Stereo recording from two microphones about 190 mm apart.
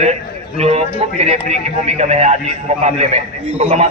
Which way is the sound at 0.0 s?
35° right (ahead or behind).